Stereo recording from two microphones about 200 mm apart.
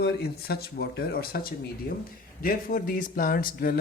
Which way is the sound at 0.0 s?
50° left (ahead or behind).